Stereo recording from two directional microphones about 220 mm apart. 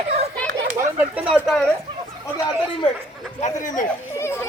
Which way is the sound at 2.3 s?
20° left (ahead or behind).